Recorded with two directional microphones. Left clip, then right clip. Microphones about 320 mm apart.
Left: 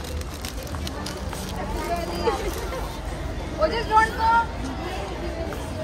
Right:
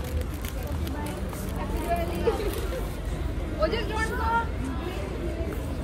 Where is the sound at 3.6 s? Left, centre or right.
Left.